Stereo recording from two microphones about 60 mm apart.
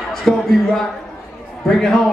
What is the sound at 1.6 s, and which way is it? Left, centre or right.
Speech, centre.